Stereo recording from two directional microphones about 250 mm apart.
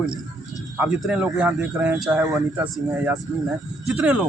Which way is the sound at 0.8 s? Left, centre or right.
Centre.